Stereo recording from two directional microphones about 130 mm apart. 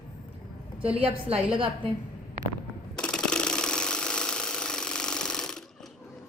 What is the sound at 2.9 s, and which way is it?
Jackhammer, 5° left (ahead or behind).